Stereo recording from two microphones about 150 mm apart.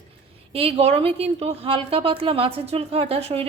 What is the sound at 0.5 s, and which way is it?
A woman's voice, 40° right (ahead or behind).